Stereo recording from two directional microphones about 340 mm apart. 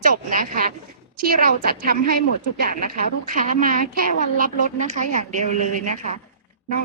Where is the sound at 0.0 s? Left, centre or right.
Right.